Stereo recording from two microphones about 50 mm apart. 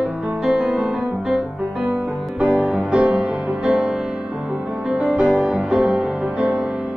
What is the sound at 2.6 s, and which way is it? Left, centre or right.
Music, centre.